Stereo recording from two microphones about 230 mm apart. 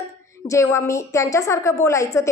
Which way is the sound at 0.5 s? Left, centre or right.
Centre.